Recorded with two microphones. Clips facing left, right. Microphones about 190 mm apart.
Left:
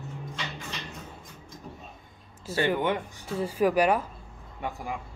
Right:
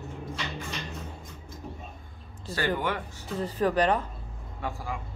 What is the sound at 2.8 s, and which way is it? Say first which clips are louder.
Speech: left 3 dB; 20° left (ahead or behind).